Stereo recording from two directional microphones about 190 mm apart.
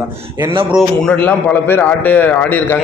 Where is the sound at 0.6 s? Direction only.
5° right (ahead or behind).